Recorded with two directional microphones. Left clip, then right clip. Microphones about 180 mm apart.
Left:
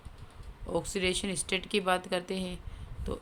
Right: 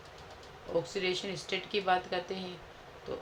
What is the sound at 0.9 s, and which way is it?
Speech, 65° left (ahead or behind).